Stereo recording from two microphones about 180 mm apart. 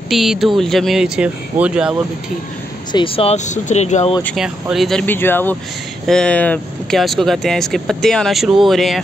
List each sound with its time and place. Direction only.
0.1 s speech: centre (ahead or behind)
2.9 s speech: 30° left (ahead or behind)
4.4 s speech: centre (ahead or behind)